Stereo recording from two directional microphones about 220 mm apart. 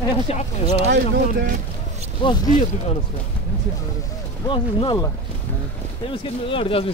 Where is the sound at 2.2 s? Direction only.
20° left (ahead or behind).